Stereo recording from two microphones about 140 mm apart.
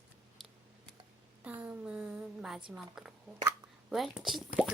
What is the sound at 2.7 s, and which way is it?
Speech, 5° right (ahead or behind).